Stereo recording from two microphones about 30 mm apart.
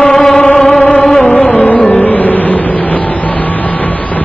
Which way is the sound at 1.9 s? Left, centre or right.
Left.